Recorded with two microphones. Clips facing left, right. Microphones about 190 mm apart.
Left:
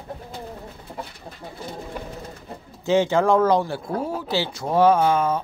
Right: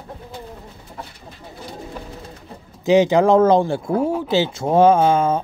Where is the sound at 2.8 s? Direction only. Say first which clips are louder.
Right 5 dB; 15° right (ahead or behind).